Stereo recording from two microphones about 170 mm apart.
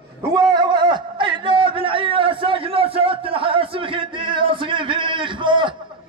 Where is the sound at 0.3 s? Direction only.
25° right (ahead or behind).